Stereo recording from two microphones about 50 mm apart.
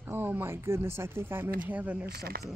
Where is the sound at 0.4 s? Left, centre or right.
Right.